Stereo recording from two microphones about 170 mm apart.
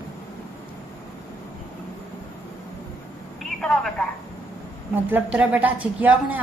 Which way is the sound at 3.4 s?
5° left (ahead or behind).